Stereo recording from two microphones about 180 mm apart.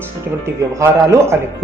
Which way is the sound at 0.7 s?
15° right (ahead or behind).